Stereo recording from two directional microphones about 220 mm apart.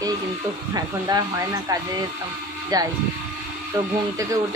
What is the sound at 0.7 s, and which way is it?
Speech, 15° right (ahead or behind).